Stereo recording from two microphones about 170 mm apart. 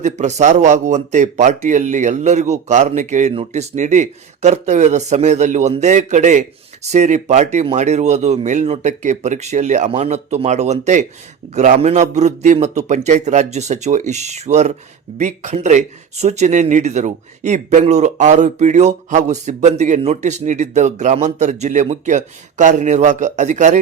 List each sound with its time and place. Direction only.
0.0 s a man's voice: 45° right (ahead or behind)